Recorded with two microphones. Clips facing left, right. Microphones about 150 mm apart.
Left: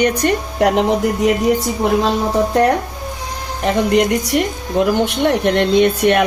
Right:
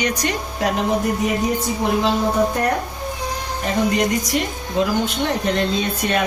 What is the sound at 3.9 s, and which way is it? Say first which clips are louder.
Speech: left 5 dB; 60° left (ahead or behind).